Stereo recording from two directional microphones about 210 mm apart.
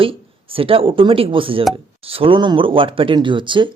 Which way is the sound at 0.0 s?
25° right (ahead or behind).